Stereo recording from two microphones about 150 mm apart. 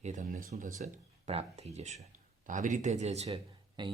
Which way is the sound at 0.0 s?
55° right (ahead or behind).